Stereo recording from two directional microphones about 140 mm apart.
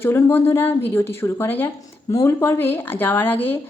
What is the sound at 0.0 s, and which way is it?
A woman's voice, 15° left (ahead or behind).